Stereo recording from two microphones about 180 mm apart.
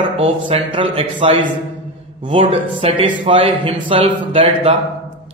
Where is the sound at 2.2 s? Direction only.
30° right (ahead or behind).